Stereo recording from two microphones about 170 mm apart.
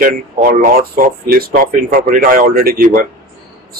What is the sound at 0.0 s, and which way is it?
Speech, 55° right (ahead or behind).